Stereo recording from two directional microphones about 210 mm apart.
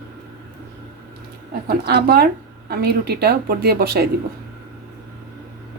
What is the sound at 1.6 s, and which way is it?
A woman's voice, 50° right (ahead or behind).